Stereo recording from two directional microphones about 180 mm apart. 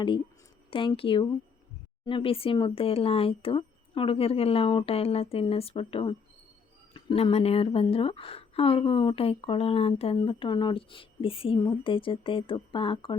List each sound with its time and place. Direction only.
0.7 s a woman's voice: 30° left (ahead or behind)